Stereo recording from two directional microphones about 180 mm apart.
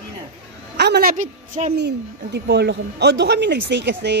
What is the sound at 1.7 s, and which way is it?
Speech, 70° right (ahead or behind).